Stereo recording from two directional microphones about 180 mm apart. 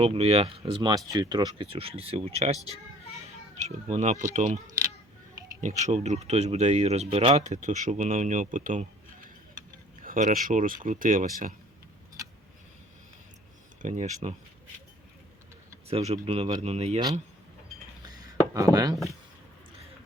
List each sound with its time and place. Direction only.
0.0 s speech: 35° right (ahead or behind)
5.9 s speech: 40° right (ahead or behind)
13.8 s speech: 40° right (ahead or behind)
15.9 s speech: 35° right (ahead or behind)
18.5 s speech: 20° right (ahead or behind)